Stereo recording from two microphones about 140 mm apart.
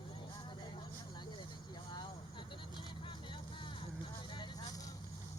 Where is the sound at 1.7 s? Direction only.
35° left (ahead or behind).